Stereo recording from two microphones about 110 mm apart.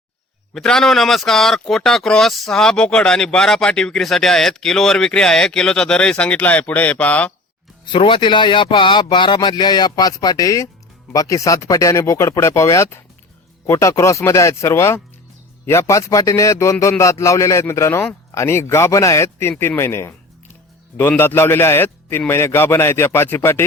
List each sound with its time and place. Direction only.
0.5 s speech: 5° left (ahead or behind)
7.9 s a man's voice: 50° left (ahead or behind); by 23.6 s 20° left (ahead or behind)